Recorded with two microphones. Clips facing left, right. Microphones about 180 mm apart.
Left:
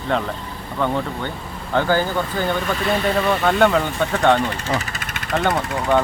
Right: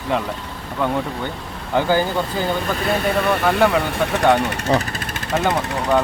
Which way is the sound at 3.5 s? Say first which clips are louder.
Even; 5° right (ahead or behind).